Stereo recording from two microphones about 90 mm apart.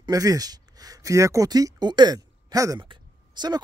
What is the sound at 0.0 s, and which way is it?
Speech, 40° right (ahead or behind).